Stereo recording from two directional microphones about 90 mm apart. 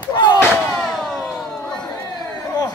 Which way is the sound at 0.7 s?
5° left (ahead or behind).